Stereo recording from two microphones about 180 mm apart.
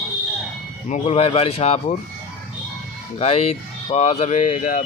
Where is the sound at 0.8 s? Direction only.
40° left (ahead or behind).